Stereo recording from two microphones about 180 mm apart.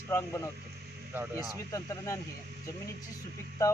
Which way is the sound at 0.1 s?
15° left (ahead or behind).